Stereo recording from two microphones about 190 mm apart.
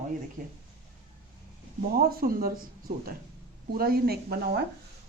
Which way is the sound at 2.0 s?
55° right (ahead or behind).